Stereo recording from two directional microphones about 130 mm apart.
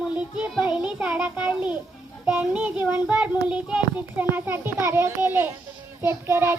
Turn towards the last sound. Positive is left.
turn(degrees=-20)  # may be behind; listen again after turning